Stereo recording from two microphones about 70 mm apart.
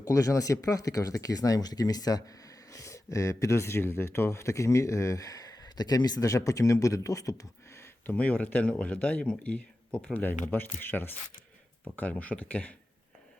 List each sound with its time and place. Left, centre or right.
0.0 s speech: left
7.8 s speech: left
10.2 s speech: left